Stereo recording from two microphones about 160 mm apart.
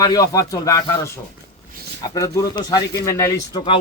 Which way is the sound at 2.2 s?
25° left (ahead or behind).